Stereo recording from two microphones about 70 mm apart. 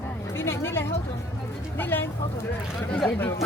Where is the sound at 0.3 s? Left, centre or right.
Left.